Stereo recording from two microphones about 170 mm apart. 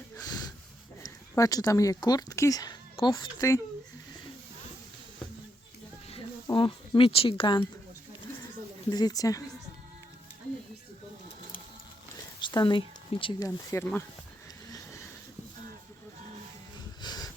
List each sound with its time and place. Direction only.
0.2 s snort: 20° left (ahead or behind)
1.0 s speech: 20° left (ahead or behind)
6.1 s speech: 30° left (ahead or behind)
8.9 s speech: 25° left (ahead or behind)
12.4 s speech: 25° left (ahead or behind)
17.0 s a sound: 25° left (ahead or behind)